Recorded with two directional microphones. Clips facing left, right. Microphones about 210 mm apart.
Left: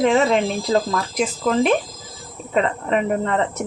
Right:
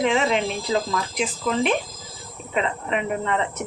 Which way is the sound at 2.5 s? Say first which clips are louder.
Left 5 dB; 40° left (ahead or behind).